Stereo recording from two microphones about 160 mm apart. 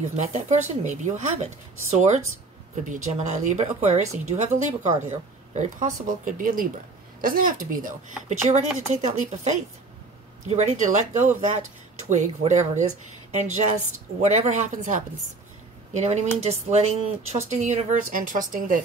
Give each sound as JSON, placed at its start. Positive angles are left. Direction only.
{"t": 0.0, "sound": "speech", "side_deg": -45}
{"t": 8.3, "sound": "speech", "side_deg": -45}
{"t": 10.5, "sound": "speech", "side_deg": -45}
{"t": 14.2, "sound": "speech", "side_deg": -45}